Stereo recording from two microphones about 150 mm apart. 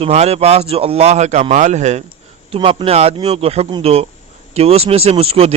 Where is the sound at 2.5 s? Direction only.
35° right (ahead or behind).